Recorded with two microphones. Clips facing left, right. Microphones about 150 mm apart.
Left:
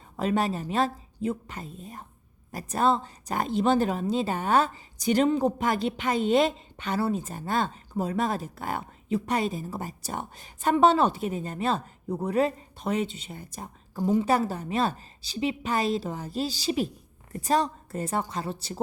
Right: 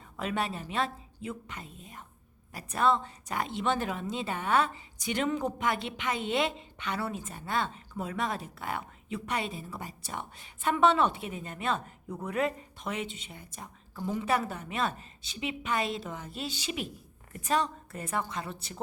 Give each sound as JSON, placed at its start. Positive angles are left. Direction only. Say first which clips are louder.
{"t": 0.2, "sound": "a woman's voice", "louder": "left 7 dB", "side_deg": 35}